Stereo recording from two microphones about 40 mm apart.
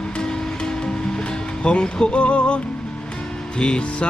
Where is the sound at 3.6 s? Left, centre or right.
Left.